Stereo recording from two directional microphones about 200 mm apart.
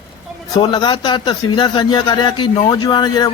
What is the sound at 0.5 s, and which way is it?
Speech, 20° left (ahead or behind).